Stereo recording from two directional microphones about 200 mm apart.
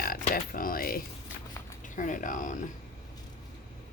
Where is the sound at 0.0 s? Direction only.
50° left (ahead or behind).